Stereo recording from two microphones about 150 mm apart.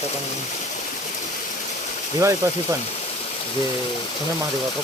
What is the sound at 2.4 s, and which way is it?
Speech, 20° right (ahead or behind).